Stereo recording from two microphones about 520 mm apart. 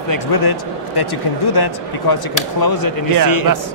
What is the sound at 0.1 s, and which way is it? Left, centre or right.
A man's voice, left.